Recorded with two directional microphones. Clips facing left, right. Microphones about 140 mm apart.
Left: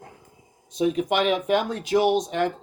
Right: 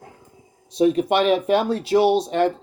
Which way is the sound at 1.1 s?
35° right (ahead or behind).